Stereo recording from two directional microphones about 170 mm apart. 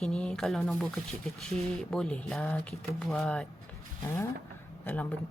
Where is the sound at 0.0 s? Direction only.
5° left (ahead or behind).